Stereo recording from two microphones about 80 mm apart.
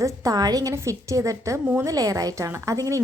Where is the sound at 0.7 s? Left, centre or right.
Right.